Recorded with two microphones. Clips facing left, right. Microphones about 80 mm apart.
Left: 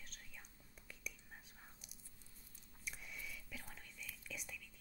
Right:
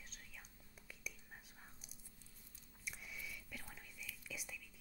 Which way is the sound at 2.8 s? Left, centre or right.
Centre.